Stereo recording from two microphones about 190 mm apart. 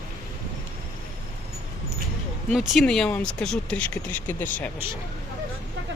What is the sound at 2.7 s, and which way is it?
Speech, centre (ahead or behind).